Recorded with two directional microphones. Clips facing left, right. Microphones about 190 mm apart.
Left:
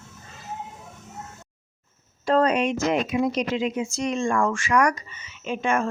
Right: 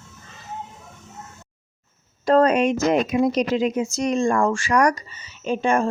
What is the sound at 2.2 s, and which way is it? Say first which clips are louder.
Speech: right 4 dB; 45° right (ahead or behind).